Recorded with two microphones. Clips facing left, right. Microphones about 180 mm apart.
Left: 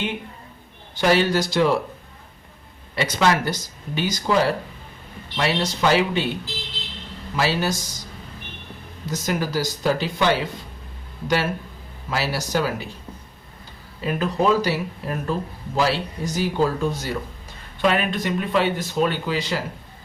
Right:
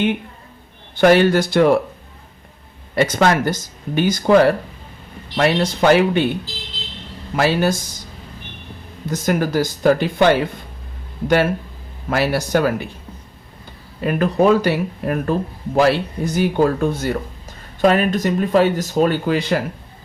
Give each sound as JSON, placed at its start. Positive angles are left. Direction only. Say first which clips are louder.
{"t": 0.9, "sound": "speech", "louder": "right 6 dB", "side_deg": -55}
{"t": 2.9, "sound": "speech", "louder": "right 5 dB", "side_deg": -50}
{"t": 7.3, "sound": "speech", "louder": "right 6 dB", "side_deg": -55}
{"t": 9.0, "sound": "speech", "louder": "right 6 dB", "side_deg": -55}
{"t": 12.0, "sound": "speech", "louder": "right 7 dB", "side_deg": -55}
{"t": 14.0, "sound": "speech", "louder": "right 6 dB", "side_deg": -55}
{"t": 17.7, "sound": "speech", "louder": "right 6 dB", "side_deg": -40}